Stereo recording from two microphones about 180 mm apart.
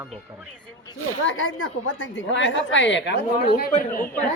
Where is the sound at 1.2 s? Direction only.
90° left; by 3.7 s 65° left (ahead or behind).